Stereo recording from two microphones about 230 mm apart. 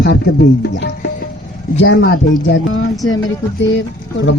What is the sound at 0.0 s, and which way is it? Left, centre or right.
Speech, left.